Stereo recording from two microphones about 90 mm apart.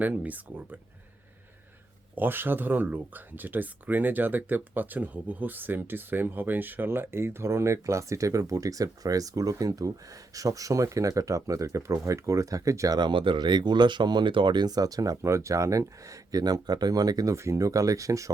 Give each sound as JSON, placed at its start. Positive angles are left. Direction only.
{"t": 0.0, "sound": "speech", "side_deg": -15}
{"t": 2.1, "sound": "speech", "side_deg": -25}
{"t": 13.0, "sound": "speech", "side_deg": -65}
{"t": 17.3, "sound": "speech", "side_deg": -30}